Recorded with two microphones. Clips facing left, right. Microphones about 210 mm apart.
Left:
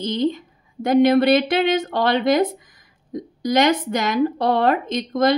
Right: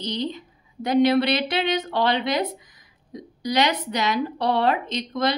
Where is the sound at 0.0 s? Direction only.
50° left (ahead or behind).